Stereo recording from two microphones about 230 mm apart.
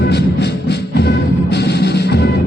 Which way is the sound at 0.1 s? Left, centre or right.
Left.